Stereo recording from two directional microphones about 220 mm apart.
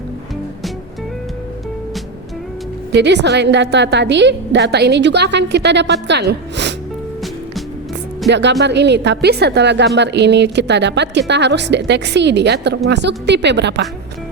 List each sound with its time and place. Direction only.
2.9 s a woman's voice: 50° right (ahead or behind)
8.3 s a woman's voice: 50° right (ahead or behind)